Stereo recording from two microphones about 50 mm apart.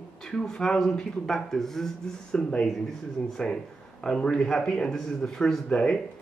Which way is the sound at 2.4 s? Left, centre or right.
Centre.